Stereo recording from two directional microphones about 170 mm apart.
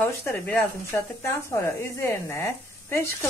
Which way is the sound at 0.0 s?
10° left (ahead or behind).